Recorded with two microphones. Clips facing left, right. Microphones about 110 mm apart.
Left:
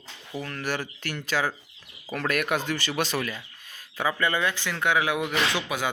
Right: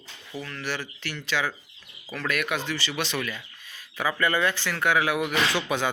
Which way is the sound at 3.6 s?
45° left (ahead or behind).